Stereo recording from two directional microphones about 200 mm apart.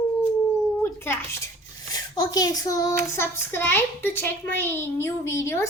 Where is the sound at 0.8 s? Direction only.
10° left (ahead or behind).